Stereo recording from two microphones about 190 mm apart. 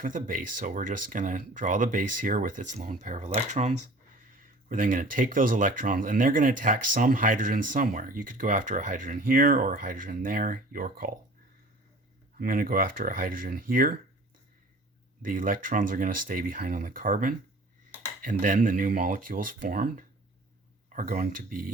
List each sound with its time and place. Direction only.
0.0 s speech: 45° right (ahead or behind)
12.4 s speech: 50° right (ahead or behind)
15.2 s speech: 45° right (ahead or behind)